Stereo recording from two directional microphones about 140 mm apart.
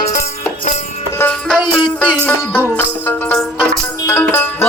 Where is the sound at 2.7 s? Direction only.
15° left (ahead or behind).